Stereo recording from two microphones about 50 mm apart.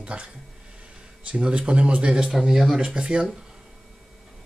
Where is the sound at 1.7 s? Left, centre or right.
Right.